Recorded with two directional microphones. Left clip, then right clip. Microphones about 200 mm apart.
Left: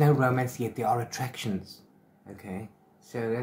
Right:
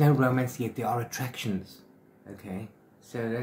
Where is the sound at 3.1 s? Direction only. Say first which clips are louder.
Left 2 dB; centre (ahead or behind).